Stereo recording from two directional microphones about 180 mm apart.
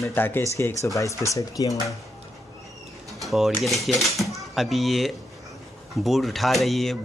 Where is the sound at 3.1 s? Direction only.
Centre (ahead or behind).